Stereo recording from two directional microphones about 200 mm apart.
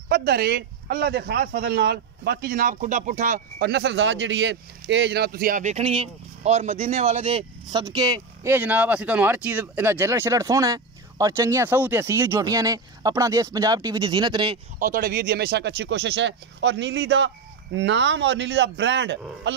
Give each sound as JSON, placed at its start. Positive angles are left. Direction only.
{"t": 0.1, "sound": "speech", "side_deg": -50}
{"t": 3.6, "sound": "speech", "side_deg": -60}
{"t": 14.8, "sound": "speech", "side_deg": -45}